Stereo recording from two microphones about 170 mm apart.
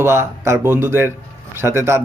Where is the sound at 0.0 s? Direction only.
15° right (ahead or behind).